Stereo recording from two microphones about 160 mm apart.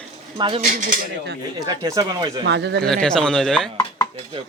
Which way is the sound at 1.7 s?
25° right (ahead or behind).